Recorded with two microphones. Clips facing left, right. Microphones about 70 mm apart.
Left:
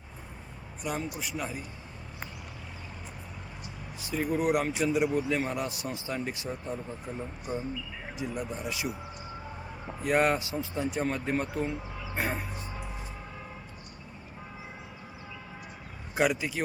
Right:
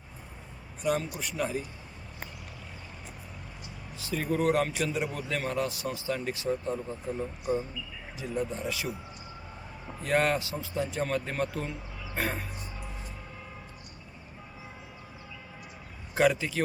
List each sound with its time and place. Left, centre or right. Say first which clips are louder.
0.8 s a man's voice: right 4 dB; centre
4.0 s speech: right 1 dB; left
8.2 s speech: right 3 dB; centre
10.0 s speech: left 1 dB; centre
16.1 s speech: right 2 dB; centre